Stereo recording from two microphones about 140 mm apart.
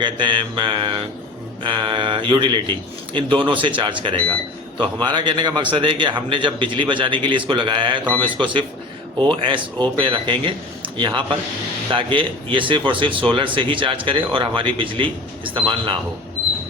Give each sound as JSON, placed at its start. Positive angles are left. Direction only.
{"t": 0.0, "sound": "a man's voice", "side_deg": -35}